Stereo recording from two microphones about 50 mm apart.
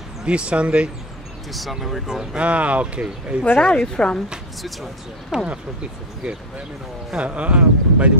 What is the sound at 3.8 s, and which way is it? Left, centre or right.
Speech, centre.